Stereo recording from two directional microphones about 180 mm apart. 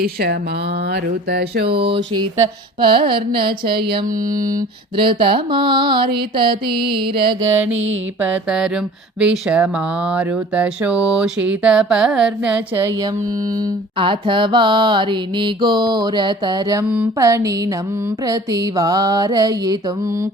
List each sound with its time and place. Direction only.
0.0 s speech: 60° right (ahead or behind)
1.6 s a sound: 30° right (ahead or behind)
2.8 s mantra: 25° right (ahead or behind)
7.4 s speech: 10° right (ahead or behind)
8.2 s a sound: 5° right (ahead or behind)
9.2 s speech: 5° right (ahead or behind)
14.0 s mantra: 30° right (ahead or behind)
16.9 s speech: 10° right (ahead or behind)
18.3 s mantra: 20° right (ahead or behind)